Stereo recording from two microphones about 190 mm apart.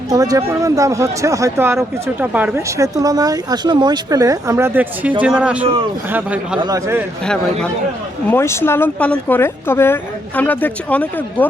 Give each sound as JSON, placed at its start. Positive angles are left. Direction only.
{"t": 0.1, "sound": "a man's voice", "side_deg": -20}
{"t": 6.6, "sound": "speech", "side_deg": -20}
{"t": 8.3, "sound": "speech", "side_deg": 15}